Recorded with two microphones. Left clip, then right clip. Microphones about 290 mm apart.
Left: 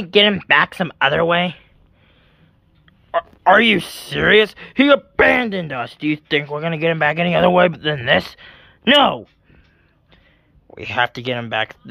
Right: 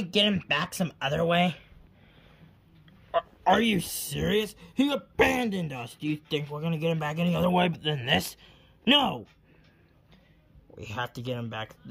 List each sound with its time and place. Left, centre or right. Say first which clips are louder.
0.0 s speech: left 11 dB; centre
3.1 s speech: left 10 dB; centre
11.2 s speech: left 14 dB; left